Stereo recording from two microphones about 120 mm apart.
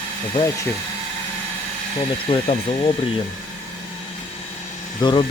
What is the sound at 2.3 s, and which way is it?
Speech, 45° left (ahead or behind).